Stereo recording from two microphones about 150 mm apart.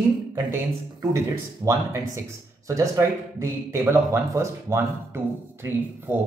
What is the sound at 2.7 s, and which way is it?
Speech, 20° right (ahead or behind).